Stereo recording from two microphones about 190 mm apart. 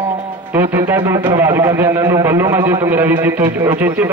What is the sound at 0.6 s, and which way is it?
A man's voice, 10° right (ahead or behind).